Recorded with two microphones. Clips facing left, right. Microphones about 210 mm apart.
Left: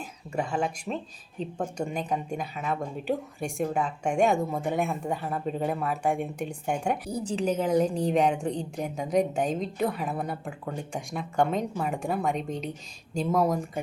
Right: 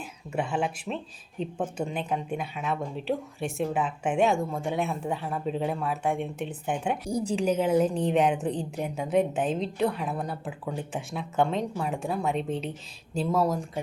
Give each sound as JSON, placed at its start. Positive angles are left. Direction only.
{"t": 0.0, "sound": "a woman's voice", "side_deg": -5}
{"t": 9.5, "sound": "a woman's voice", "side_deg": 45}
{"t": 9.8, "sound": "a woman's voice", "side_deg": 0}